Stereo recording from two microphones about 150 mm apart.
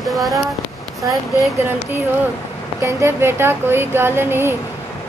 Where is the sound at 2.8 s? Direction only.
15° right (ahead or behind).